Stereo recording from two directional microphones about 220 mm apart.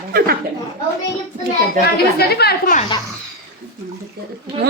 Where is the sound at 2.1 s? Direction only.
45° left (ahead or behind).